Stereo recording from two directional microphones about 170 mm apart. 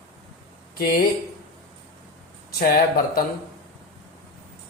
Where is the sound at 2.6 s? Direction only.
60° left (ahead or behind).